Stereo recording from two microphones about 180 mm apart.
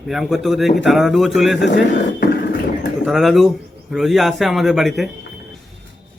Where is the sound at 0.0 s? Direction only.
Centre (ahead or behind).